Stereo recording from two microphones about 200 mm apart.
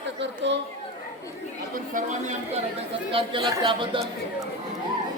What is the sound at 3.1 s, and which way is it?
Speech, 25° right (ahead or behind).